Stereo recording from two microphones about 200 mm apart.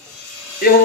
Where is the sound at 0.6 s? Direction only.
45° left (ahead or behind).